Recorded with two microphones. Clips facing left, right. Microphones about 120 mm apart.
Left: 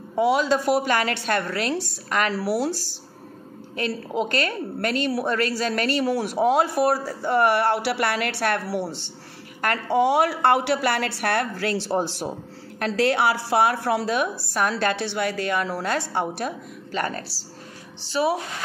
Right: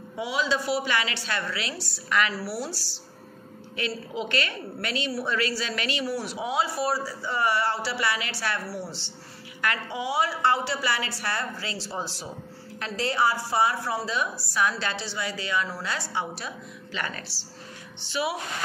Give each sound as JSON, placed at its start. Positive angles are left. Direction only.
{"t": 0.1, "sound": "a woman's voice", "side_deg": 50}
{"t": 2.3, "sound": "a woman's voice", "side_deg": 60}